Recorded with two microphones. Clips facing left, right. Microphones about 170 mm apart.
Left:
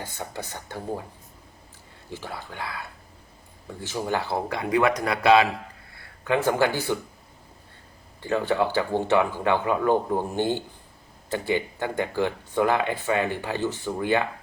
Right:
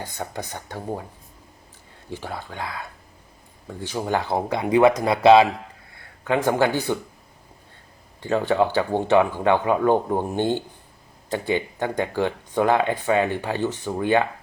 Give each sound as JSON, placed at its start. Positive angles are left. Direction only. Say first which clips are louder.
{"t": 0.0, "sound": "speech", "louder": "right 3 dB", "side_deg": -15}
{"t": 2.0, "sound": "speech", "louder": "right 3 dB", "side_deg": -15}
{"t": 3.8, "sound": "speech", "louder": "right 3 dB", "side_deg": -15}
{"t": 8.2, "sound": "speech", "louder": "right 3 dB", "side_deg": -15}